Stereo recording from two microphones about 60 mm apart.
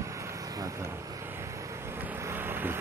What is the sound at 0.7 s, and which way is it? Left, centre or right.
Speech, right.